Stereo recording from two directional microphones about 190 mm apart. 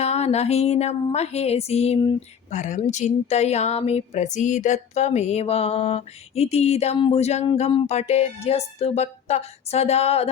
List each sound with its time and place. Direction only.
0.0 s a woman's voice: 35° left (ahead or behind)
2.5 s a woman's voice: 40° left (ahead or behind)